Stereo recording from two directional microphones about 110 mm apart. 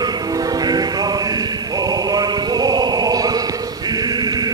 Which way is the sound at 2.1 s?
40° right (ahead or behind).